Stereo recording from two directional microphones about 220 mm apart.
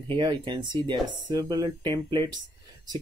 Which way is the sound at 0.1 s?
20° right (ahead or behind).